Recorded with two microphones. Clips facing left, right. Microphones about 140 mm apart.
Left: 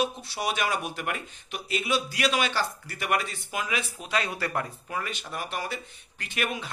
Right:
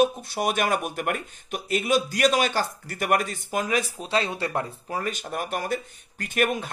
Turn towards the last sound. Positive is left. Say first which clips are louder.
# right 7 dB
turn(degrees=-50)  # may be behind; listen again after turning